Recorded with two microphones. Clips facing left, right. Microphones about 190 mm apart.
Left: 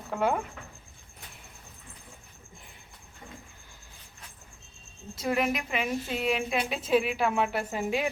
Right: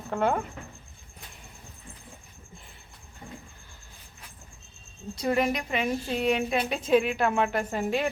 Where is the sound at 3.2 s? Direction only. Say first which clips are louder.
Right 4 dB; 25° right (ahead or behind).